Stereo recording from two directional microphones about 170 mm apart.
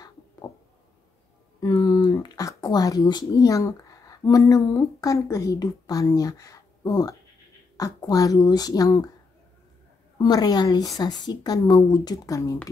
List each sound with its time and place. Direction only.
1.6 s a woman's voice: 20° left (ahead or behind)
10.1 s a woman's voice: 25° left (ahead or behind)